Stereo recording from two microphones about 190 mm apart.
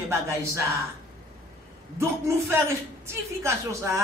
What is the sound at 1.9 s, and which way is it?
A man's voice, 15° right (ahead or behind).